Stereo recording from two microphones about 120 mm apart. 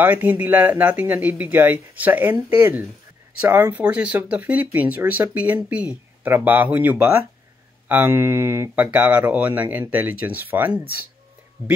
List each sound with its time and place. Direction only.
0.0 s speech: 15° right (ahead or behind)